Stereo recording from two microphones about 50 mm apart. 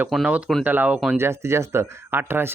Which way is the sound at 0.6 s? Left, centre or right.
Right.